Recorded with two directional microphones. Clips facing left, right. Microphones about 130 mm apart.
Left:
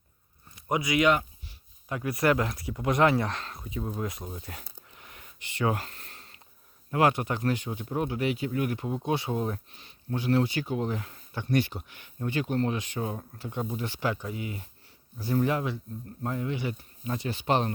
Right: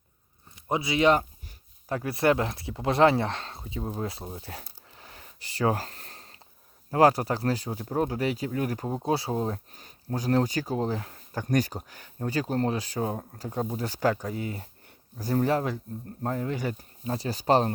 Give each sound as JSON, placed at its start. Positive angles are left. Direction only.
{"t": 0.7, "sound": "speech", "side_deg": -30}